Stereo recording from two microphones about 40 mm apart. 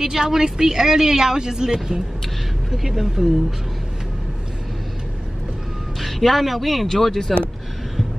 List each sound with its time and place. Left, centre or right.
0.0 s speech: centre
5.9 s speech: centre